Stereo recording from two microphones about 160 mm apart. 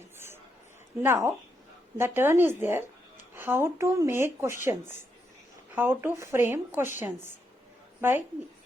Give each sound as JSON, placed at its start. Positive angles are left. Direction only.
{"t": 1.0, "sound": "speech", "side_deg": -15}
{"t": 8.0, "sound": "speech", "side_deg": -15}